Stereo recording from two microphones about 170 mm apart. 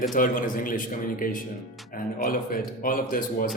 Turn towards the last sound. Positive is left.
turn(degrees=55)  # may be behind; listen again after turning